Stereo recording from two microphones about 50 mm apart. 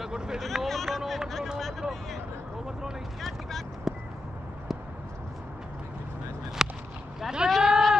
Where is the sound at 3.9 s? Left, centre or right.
Centre.